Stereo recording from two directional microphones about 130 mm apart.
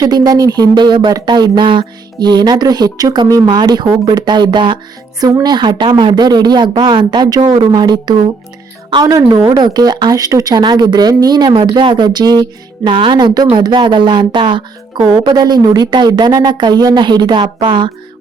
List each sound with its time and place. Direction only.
0.0 s speech: 30° right (ahead or behind)